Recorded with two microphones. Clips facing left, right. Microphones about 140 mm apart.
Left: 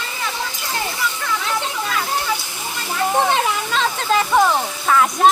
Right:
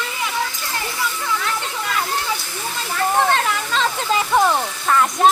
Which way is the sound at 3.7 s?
Centre (ahead or behind).